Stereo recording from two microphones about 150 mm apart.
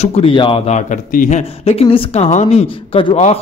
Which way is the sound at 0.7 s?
55° left (ahead or behind).